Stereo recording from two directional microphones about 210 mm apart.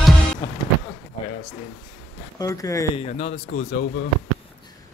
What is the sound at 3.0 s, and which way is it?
Speech, 30° left (ahead or behind).